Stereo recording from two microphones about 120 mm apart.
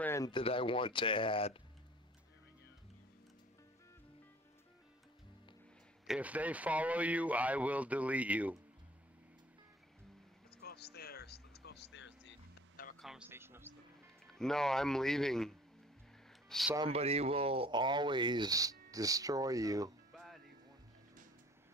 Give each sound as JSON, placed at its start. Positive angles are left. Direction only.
{"t": 0.3, "sound": "speech", "side_deg": 50}
{"t": 6.0, "sound": "speech", "side_deg": -10}
{"t": 13.0, "sound": "a sound", "side_deg": -5}
{"t": 13.3, "sound": "vehicle", "side_deg": -20}
{"t": 14.2, "sound": "speech", "side_deg": 5}
{"t": 16.5, "sound": "a sound", "side_deg": 5}
{"t": 16.9, "sound": "speech", "side_deg": -60}
{"t": 20.1, "sound": "music", "side_deg": 0}